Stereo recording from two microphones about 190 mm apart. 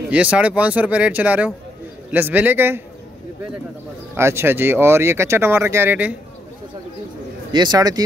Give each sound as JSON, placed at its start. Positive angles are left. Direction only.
{"t": 0.1, "sound": "speech", "side_deg": -5}
{"t": 4.2, "sound": "speech", "side_deg": -15}
{"t": 7.5, "sound": "speech", "side_deg": -25}